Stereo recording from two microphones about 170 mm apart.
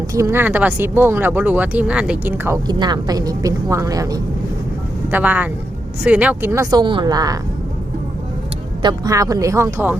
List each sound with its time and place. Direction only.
0.1 s speech: 15° right (ahead or behind)
2.6 s a woman's voice: 25° right (ahead or behind)
5.1 s a woman's voice: 10° right (ahead or behind)
8.8 s a woman's voice: 25° right (ahead or behind)